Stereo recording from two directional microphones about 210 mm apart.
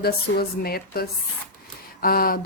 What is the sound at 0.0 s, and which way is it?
A woman's voice, 45° left (ahead or behind).